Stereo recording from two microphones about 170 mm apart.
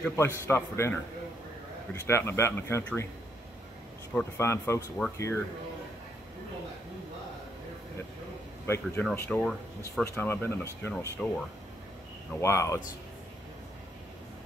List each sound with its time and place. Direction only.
0.0 s speech: 15° left (ahead or behind)
2.0 s speech: 15° left (ahead or behind)
4.1 s speech: 15° left (ahead or behind)
8.6 s speech: 15° left (ahead or behind)